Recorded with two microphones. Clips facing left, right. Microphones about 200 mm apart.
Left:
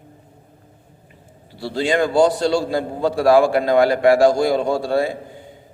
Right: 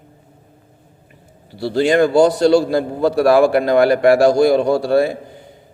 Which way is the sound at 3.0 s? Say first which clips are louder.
Right 2 dB; 65° right (ahead or behind).